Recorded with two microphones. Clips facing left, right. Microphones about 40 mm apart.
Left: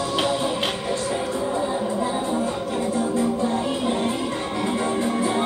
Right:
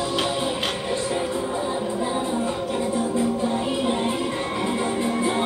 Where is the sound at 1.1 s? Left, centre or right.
Right.